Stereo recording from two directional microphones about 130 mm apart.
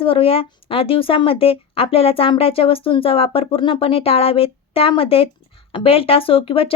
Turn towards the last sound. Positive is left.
turn(degrees=45)  # may be behind; listen again after turning